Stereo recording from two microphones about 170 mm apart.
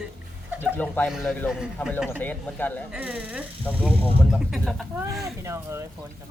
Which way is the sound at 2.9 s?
5° right (ahead or behind).